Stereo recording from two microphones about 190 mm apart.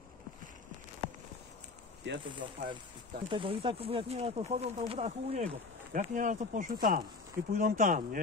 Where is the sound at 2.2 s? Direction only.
25° right (ahead or behind).